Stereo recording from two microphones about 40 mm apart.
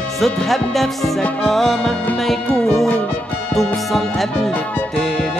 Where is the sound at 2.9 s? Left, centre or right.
Left.